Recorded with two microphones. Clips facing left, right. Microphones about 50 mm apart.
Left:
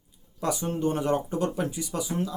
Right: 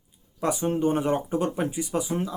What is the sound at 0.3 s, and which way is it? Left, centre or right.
Speech, right.